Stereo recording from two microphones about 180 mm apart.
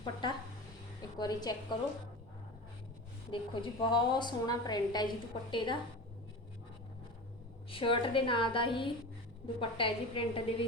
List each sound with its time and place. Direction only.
0.0 s a woman's voice: 25° left (ahead or behind)
3.3 s a woman's voice: 25° left (ahead or behind)
7.7 s a woman's voice: 30° left (ahead or behind)